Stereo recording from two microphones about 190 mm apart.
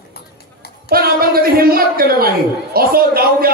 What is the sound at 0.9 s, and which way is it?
Speech, 50° right (ahead or behind).